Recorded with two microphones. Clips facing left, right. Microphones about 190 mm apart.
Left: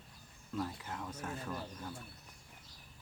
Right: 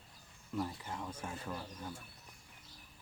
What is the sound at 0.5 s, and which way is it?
Speech, 10° right (ahead or behind).